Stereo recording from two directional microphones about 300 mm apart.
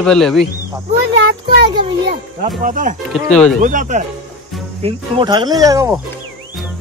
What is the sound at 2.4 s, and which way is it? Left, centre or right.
Speech, right.